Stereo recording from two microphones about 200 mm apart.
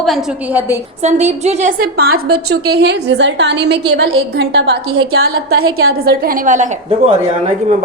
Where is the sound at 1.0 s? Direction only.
35° right (ahead or behind).